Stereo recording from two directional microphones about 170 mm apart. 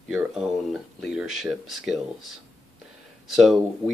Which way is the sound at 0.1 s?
5° right (ahead or behind).